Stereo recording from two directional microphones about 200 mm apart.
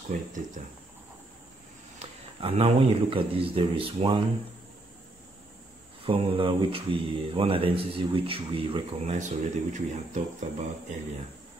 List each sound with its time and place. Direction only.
0.1 s speech: 40° right (ahead or behind)
2.0 s speech: 30° right (ahead or behind)
6.0 s speech: 25° right (ahead or behind)